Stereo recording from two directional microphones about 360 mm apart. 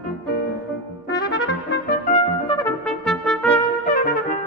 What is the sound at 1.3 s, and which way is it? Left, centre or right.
Trumpet, left.